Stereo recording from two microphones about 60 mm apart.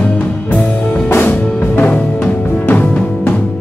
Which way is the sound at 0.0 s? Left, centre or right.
Left.